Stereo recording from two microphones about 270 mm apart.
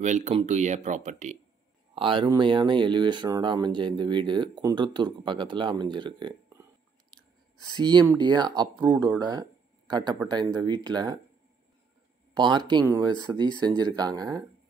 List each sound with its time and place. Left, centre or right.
0.0 s speech: right
7.7 s speech: centre
12.4 s speech: centre